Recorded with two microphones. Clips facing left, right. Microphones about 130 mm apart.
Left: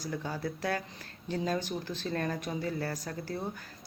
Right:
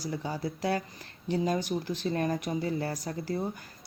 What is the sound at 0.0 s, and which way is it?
A woman's voice, 15° right (ahead or behind).